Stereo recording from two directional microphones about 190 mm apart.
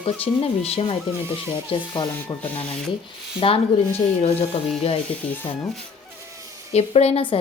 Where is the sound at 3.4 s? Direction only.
30° left (ahead or behind).